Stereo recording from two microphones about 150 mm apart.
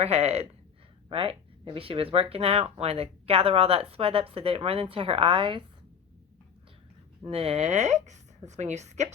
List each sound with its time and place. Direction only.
0.0 s a woman's voice: 45° right (ahead or behind)
7.3 s a woman's voice: 40° right (ahead or behind)